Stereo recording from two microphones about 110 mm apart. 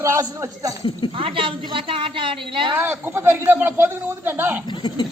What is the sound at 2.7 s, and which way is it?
A man's voice, 20° right (ahead or behind).